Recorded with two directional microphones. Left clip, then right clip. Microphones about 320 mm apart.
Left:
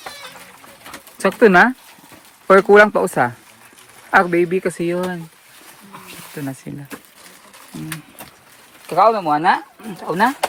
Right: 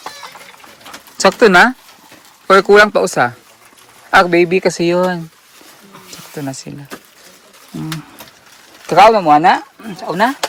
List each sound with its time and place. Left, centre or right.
1.2 s speech: centre
6.3 s speech: centre
8.9 s speech: right; by 10.3 s centre